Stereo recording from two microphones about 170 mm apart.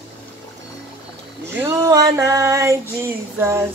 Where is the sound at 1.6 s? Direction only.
20° right (ahead or behind).